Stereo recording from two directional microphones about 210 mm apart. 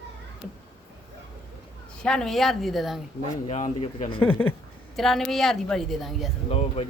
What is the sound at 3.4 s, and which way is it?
Speech, 30° left (ahead or behind).